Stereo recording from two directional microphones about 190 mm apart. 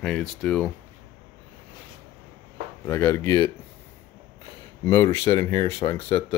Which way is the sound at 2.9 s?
15° left (ahead or behind).